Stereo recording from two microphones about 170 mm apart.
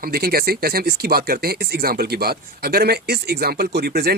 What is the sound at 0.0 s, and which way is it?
Speech, 65° right (ahead or behind).